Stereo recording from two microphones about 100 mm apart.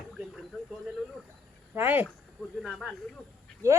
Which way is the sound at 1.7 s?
20° right (ahead or behind).